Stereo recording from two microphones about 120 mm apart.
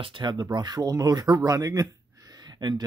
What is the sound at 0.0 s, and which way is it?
Speech, 40° right (ahead or behind).